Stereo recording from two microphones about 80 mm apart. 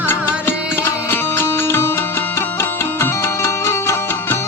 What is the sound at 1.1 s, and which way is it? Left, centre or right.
Music, left.